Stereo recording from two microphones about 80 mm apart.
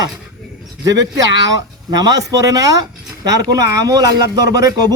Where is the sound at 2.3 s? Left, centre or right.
Right.